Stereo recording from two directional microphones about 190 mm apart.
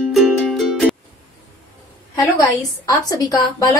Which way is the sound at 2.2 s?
20° left (ahead or behind).